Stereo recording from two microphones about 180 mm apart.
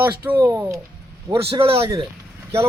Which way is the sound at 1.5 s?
30° right (ahead or behind).